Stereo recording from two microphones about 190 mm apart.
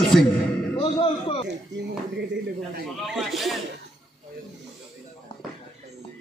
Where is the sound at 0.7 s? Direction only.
30° left (ahead or behind).